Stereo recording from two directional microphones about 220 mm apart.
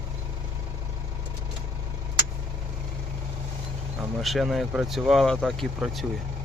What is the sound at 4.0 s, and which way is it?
Speech, centre (ahead or behind).